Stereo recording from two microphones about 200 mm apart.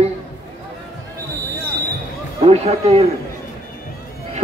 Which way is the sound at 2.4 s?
30° right (ahead or behind).